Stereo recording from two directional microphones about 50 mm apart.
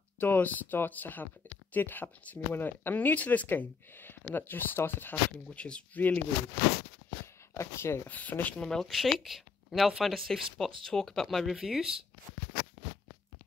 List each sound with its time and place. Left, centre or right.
0.2 s speech: left
3.4 s speech: left
5.5 s speech: left
5.9 s speech: left
7.5 s speech: left
8.1 s speech: left
8.5 s speech: centre
8.9 s speech: centre
11.6 s speech: centre